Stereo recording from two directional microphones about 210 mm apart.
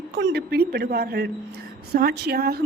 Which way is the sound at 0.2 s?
55° right (ahead or behind).